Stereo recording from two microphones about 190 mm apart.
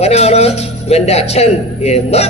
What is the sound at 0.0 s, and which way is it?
A man's voice, 35° left (ahead or behind).